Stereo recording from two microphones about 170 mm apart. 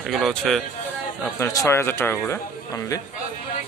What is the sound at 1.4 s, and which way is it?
A man's voice, 20° left (ahead or behind).